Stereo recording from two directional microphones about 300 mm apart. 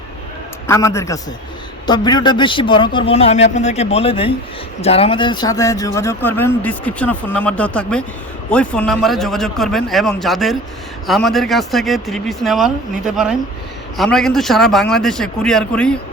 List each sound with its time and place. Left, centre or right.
0.7 s speech: centre